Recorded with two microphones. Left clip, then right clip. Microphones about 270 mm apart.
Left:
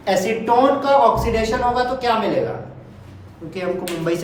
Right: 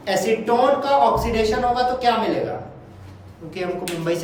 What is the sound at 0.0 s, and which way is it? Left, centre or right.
Speech, left.